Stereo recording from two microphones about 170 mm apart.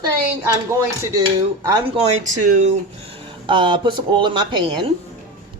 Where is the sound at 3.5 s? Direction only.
30° right (ahead or behind).